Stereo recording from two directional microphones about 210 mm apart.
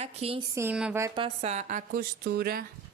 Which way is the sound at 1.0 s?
25° right (ahead or behind).